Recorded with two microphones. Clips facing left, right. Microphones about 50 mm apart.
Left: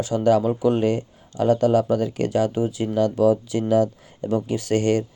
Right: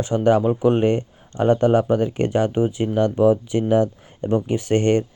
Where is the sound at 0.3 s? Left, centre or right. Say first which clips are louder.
Right 2 dB; right.